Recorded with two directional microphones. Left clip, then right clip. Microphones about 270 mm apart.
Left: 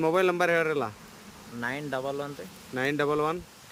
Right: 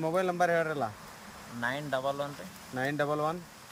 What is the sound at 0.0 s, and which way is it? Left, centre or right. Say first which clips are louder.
Speech: left 4 dB; centre.